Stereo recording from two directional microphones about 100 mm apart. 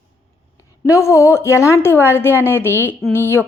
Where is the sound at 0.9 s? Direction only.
30° left (ahead or behind).